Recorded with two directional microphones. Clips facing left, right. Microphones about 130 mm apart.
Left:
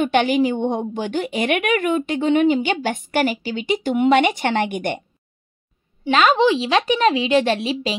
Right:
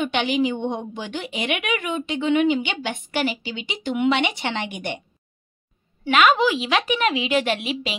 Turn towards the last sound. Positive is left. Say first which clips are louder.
# left 4 dB
turn(degrees=35)  # may be behind; listen again after turning